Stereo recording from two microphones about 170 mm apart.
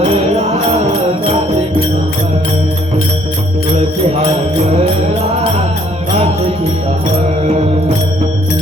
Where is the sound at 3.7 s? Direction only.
40° right (ahead or behind).